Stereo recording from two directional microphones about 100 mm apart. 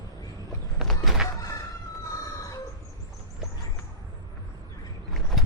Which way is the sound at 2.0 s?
35° left (ahead or behind).